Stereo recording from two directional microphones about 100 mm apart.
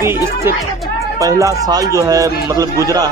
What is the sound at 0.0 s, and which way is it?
A man's voice, 25° right (ahead or behind).